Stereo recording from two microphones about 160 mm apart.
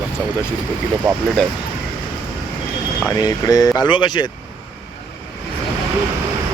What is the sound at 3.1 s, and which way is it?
Speech, 25° left (ahead or behind).